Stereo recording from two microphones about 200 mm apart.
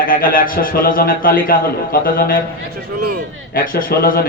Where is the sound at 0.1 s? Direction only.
45° left (ahead or behind).